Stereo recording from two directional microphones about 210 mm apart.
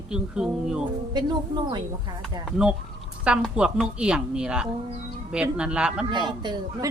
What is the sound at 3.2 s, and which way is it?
Speech, 5° right (ahead or behind).